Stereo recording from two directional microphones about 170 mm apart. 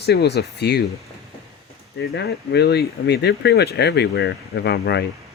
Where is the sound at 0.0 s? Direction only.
75° left (ahead or behind).